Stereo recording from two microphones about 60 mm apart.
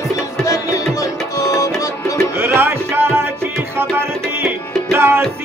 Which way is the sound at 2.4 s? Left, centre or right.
Right.